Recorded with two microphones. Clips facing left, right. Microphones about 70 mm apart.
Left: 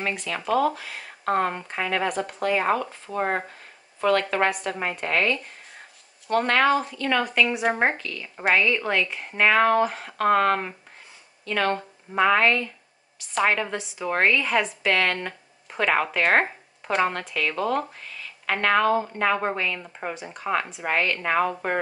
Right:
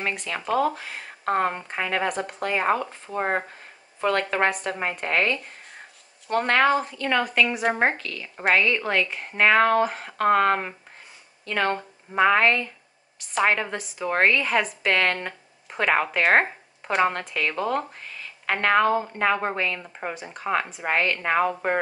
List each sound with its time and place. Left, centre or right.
0.5 s speech: right
7.2 s a woman's voice: centre
14.8 s speech: centre
17.3 s speech: right
19.3 s a woman's voice: centre